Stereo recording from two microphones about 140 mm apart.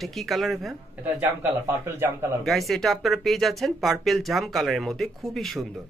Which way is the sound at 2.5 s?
Centre (ahead or behind).